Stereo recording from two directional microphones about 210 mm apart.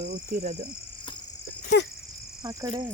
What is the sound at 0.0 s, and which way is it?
Speech, 45° right (ahead or behind).